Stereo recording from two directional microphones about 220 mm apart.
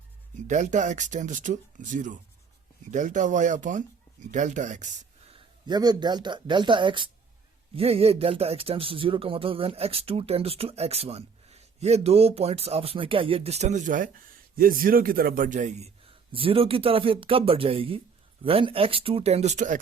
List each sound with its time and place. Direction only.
0.4 s speech: 35° right (ahead or behind)
5.6 s speech: 20° right (ahead or behind); by 19.8 s 35° right (ahead or behind)